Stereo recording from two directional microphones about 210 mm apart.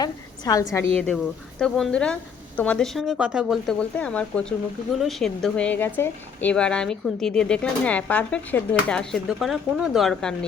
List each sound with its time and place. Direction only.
0.0 s a woman's voice: 15° left (ahead or behind)
0.9 s speech: 5° left (ahead or behind)